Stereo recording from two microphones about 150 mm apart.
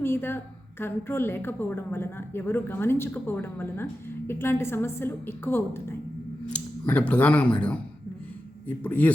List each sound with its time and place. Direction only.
0.0 s a woman's voice: 15° left (ahead or behind)